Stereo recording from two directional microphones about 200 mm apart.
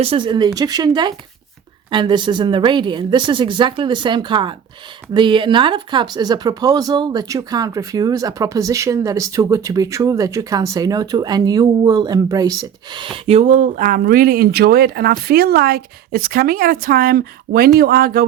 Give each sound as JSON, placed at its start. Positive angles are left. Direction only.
{"t": 0.0, "sound": "speech", "side_deg": -25}